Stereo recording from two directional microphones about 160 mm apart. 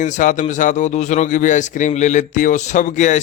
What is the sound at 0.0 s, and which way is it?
Speech, 50° left (ahead or behind).